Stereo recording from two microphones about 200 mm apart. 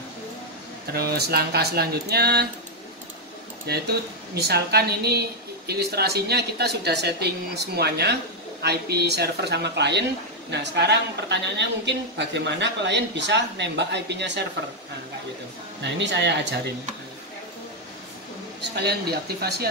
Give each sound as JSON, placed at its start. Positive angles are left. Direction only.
{"t": 0.9, "sound": "speech", "side_deg": -50}
{"t": 3.7, "sound": "speech", "side_deg": -55}
{"t": 15.8, "sound": "speech", "side_deg": -60}
{"t": 18.6, "sound": "speech", "side_deg": -55}